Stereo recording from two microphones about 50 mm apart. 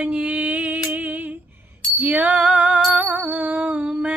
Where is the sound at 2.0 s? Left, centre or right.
Right.